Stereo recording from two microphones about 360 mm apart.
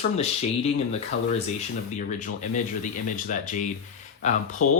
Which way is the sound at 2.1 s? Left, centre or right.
Left.